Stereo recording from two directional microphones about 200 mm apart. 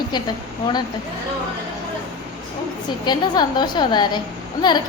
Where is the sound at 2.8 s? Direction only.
20° left (ahead or behind).